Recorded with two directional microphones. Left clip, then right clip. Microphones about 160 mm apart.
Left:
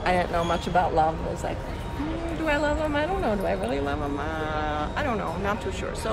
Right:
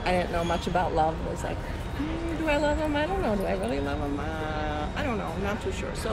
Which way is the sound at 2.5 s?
20° left (ahead or behind).